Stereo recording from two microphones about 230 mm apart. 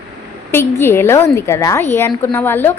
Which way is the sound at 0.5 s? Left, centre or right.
Centre.